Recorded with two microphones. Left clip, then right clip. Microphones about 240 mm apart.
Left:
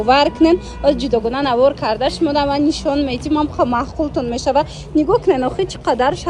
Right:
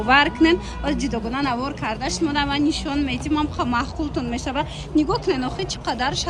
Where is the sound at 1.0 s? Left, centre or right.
Right; by 5.6 s centre.